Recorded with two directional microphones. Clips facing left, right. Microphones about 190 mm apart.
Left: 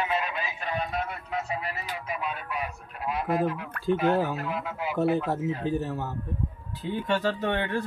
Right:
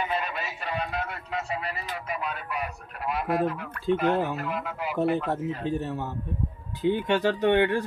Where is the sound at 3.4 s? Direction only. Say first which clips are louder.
Even; centre (ahead or behind).